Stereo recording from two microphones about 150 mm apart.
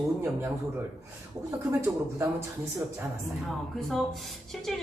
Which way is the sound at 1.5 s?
20° right (ahead or behind).